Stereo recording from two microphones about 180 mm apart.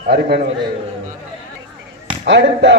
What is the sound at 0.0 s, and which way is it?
Speech, 65° right (ahead or behind).